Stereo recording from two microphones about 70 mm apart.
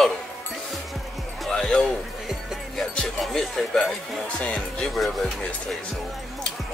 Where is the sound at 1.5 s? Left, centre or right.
Centre.